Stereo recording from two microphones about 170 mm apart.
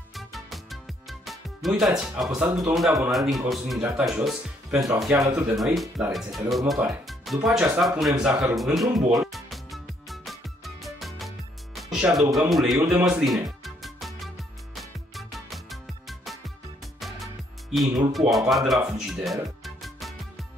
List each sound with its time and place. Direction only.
0.1 s music: centre (ahead or behind)
3.1 s speech: centre (ahead or behind)
5.2 s speech: 20° right (ahead or behind)
5.6 s speech: centre (ahead or behind)
8.9 s music: centre (ahead or behind)
12.9 s speech: 5° right (ahead or behind)
13.7 s music: centre (ahead or behind)